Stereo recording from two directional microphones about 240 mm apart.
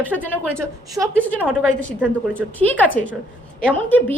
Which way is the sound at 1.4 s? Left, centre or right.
Centre.